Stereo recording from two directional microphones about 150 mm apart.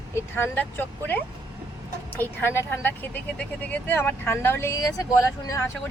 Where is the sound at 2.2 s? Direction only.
15° left (ahead or behind).